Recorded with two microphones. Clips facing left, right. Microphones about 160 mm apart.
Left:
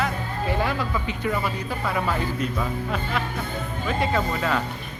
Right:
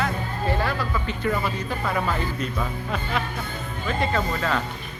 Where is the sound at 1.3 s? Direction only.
5° left (ahead or behind).